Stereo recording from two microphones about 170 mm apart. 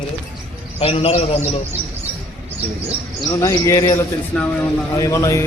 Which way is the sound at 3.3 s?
15° left (ahead or behind).